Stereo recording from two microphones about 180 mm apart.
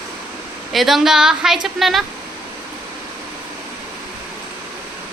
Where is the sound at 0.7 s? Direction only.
Centre (ahead or behind).